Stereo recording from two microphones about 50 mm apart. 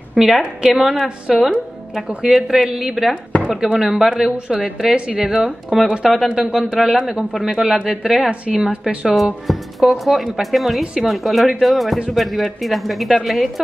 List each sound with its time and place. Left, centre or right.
0.1 s a woman's voice: centre
6.8 s speech: centre
8.3 s a woman's voice: right
9.1 s speech: centre